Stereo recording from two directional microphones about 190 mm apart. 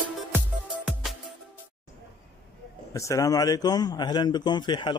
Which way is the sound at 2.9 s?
15° left (ahead or behind).